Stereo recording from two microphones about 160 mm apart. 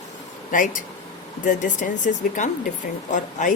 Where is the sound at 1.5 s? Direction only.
55° left (ahead or behind).